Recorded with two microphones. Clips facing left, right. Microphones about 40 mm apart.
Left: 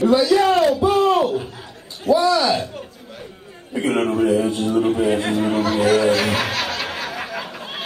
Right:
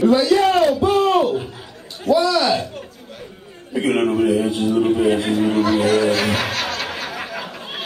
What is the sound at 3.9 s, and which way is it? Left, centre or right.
A man's voice, centre.